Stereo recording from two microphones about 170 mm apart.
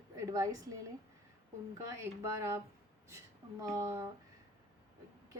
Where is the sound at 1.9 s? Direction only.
15° right (ahead or behind).